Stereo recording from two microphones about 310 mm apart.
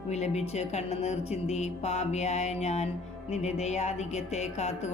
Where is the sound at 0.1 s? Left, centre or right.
Left.